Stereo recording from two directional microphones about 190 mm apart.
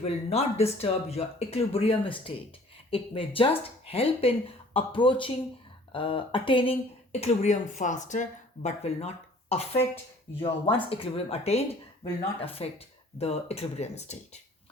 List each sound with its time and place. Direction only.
0.0 s speech: 35° left (ahead or behind)
10.8 s speech: 30° left (ahead or behind)